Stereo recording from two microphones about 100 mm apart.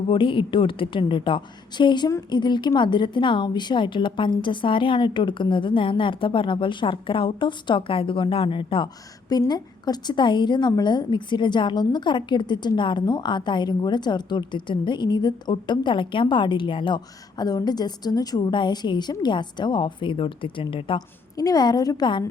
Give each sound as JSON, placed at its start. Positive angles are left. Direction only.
{"t": 0.1, "sound": "a woman's voice", "side_deg": 55}
{"t": 9.5, "sound": "a woman's voice", "side_deg": 45}
{"t": 21.3, "sound": "a woman's voice", "side_deg": 40}